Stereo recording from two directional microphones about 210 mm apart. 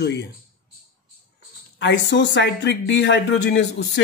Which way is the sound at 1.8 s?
60° left (ahead or behind).